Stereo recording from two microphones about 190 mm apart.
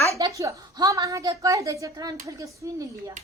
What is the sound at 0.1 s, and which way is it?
A woman's voice, 15° right (ahead or behind).